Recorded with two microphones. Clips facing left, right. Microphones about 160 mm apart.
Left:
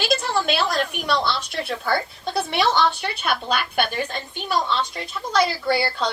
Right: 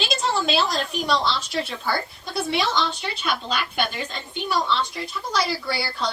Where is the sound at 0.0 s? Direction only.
60° left (ahead or behind).